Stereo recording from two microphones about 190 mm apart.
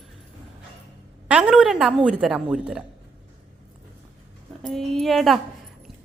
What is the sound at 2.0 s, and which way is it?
Speech, 5° right (ahead or behind).